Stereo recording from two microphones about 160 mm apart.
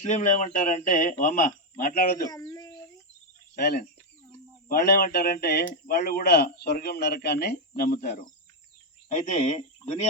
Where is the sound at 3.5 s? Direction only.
75° left (ahead or behind); by 7.6 s 90° left.